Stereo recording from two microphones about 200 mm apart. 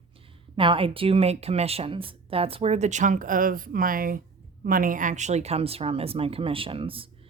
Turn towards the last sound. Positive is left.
turn(degrees=-25)  # may be behind; listen again after turning